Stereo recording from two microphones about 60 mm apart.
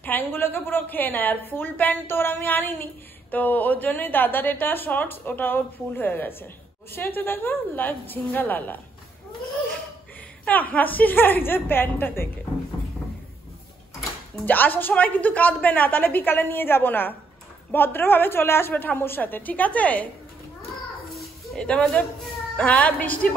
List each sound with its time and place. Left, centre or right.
0.0 s a woman's voice: left
10.4 s a woman's voice: left
14.4 s a woman's voice: left
21.5 s a woman's voice: centre